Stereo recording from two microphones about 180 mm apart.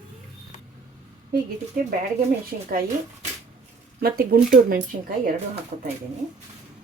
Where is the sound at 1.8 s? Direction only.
50° right (ahead or behind).